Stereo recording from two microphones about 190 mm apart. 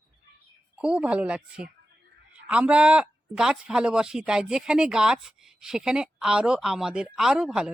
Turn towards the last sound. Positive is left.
turn(degrees=-5)  # may be behind; listen again after turning